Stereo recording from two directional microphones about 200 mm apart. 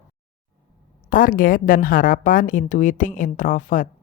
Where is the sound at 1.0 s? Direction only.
45° left (ahead or behind).